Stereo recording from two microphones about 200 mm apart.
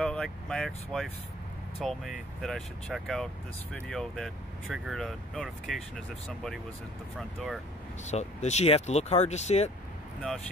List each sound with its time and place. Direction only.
0.0 s speech: 5° left (ahead or behind)
8.0 s speech: 35° left (ahead or behind)